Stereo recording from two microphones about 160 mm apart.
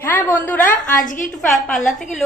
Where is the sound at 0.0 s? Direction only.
10° left (ahead or behind).